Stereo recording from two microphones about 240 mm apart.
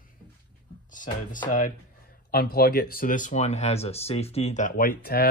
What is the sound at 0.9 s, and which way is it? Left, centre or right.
Speech, left.